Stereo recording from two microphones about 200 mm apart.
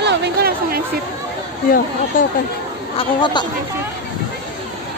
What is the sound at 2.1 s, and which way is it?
Speech, 45° left (ahead or behind).